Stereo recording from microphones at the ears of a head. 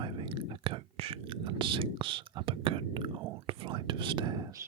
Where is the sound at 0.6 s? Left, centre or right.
Right.